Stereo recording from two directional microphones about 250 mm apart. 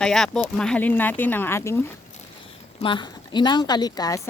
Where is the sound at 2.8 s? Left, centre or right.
Centre.